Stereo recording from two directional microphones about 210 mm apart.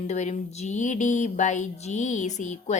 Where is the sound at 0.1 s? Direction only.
35° left (ahead or behind).